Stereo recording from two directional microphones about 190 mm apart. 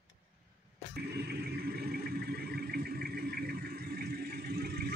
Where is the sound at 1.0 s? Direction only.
55° right (ahead or behind).